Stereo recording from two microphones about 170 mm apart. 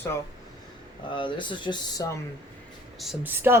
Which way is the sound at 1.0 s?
30° left (ahead or behind).